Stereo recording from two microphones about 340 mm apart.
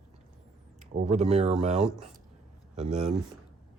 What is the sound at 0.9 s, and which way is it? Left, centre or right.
Speech, centre.